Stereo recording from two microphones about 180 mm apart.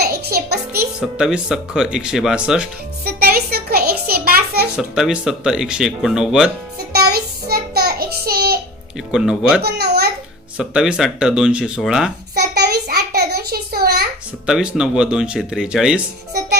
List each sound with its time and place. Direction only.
0.0 s music: 60° right (ahead or behind)
0.9 s speech: 5° right (ahead or behind)
3.0 s a sound: 60° right (ahead or behind)
4.8 s speech: 5° right (ahead or behind)
6.9 s child singing: 60° right (ahead or behind)
9.1 s speech: 5° right (ahead or behind)
9.6 s babbling: 65° right (ahead or behind)
10.6 s speech: 5° right (ahead or behind)
12.3 s a sound: 65° right (ahead or behind)
14.4 s speech: 5° right (ahead or behind)